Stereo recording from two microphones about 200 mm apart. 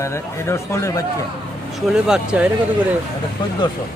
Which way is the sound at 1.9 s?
5° right (ahead or behind).